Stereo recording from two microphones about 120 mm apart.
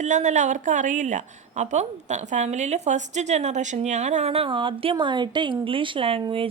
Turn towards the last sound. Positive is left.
turn(degrees=-50)  # may be behind; listen again after turning